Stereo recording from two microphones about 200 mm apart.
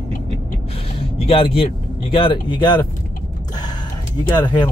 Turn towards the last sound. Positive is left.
turn(degrees=20)  # may be behind; listen again after turning